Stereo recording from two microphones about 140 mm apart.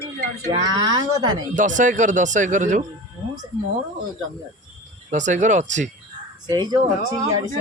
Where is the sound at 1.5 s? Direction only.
65° right (ahead or behind).